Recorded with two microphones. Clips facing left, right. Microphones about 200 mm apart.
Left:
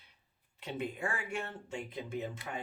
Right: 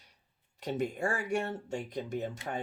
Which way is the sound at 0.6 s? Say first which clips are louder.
Right 5 dB; 45° right (ahead or behind).